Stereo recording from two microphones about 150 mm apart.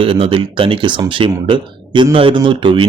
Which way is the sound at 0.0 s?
35° right (ahead or behind).